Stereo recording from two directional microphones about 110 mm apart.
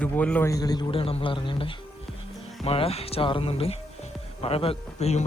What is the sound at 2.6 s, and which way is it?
A man's voice, 60° left (ahead or behind).